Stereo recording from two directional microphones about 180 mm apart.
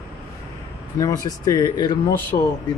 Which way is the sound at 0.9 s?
20° left (ahead or behind).